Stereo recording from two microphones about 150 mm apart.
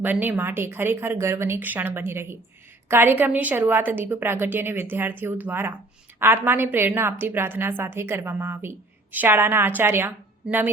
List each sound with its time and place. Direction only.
0.0 s a woman's voice: 15° right (ahead or behind)